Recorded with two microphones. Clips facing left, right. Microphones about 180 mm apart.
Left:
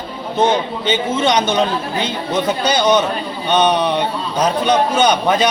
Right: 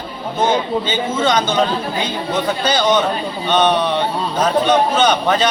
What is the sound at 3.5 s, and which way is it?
A man's voice, 15° left (ahead or behind).